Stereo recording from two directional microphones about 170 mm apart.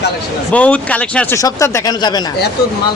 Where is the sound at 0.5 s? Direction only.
10° left (ahead or behind); by 2.2 s 25° left (ahead or behind).